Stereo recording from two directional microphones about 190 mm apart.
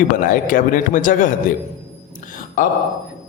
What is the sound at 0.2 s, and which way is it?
Speech, 45° left (ahead or behind).